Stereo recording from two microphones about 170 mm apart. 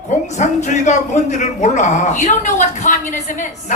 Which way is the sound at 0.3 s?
45° left (ahead or behind).